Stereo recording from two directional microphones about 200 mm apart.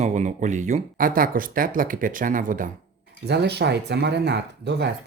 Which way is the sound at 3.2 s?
55° right (ahead or behind).